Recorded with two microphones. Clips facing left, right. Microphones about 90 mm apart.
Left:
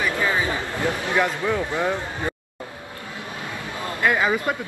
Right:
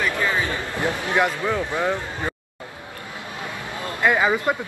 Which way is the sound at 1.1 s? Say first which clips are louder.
Right 1 dB; 20° right (ahead or behind).